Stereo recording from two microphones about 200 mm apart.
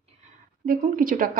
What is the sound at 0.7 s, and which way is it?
Speech, 45° right (ahead or behind).